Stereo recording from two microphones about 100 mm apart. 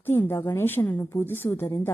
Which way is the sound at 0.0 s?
20° left (ahead or behind).